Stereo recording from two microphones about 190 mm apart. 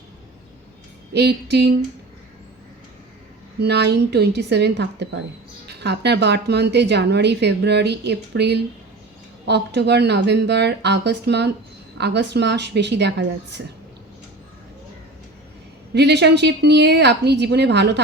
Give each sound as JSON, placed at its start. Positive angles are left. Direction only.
{"t": 1.1, "sound": "a woman's voice", "side_deg": -65}
{"t": 3.6, "sound": "a woman's voice", "side_deg": -60}
{"t": 16.0, "sound": "a woman's voice", "side_deg": -65}